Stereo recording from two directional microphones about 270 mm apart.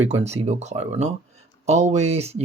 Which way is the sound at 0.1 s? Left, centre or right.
Right.